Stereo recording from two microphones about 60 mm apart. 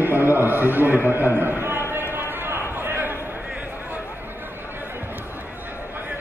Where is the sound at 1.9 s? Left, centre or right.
Right.